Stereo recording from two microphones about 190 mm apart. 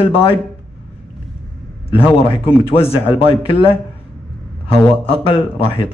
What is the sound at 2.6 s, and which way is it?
Speech, 30° left (ahead or behind).